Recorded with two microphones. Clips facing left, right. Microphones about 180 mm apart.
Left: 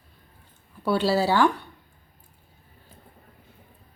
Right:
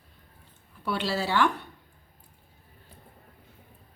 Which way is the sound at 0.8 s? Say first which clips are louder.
Left 7 dB; 35° left (ahead or behind).